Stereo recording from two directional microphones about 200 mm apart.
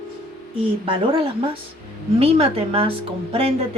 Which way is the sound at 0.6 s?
25° right (ahead or behind).